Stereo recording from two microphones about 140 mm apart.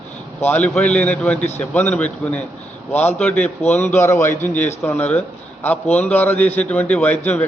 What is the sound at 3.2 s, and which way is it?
A man's voice, 10° left (ahead or behind).